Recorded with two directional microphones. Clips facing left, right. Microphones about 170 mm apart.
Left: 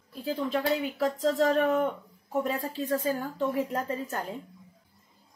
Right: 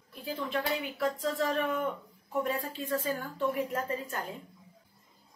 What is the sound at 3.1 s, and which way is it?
A woman's voice, 25° left (ahead or behind).